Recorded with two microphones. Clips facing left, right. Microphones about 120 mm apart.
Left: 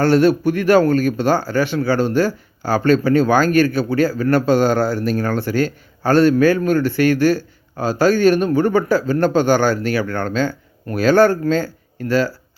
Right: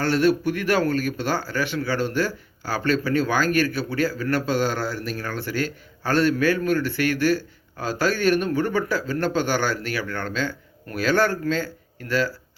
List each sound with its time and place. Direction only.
0.0 s speech: 45° left (ahead or behind)